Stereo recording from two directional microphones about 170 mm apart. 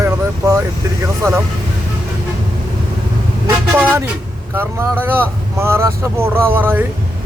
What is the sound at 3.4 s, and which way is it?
Vehicle, 15° right (ahead or behind).